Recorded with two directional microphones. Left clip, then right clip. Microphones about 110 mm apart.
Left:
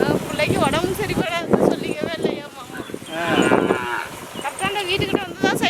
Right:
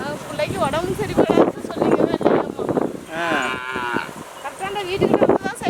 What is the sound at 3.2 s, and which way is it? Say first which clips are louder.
Livestock: left 4 dB; 50° right (ahead or behind).